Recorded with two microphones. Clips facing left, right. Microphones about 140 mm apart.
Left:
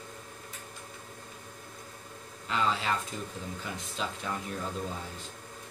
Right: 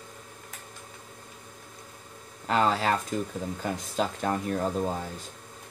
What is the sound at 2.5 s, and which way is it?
Speech, 50° right (ahead or behind).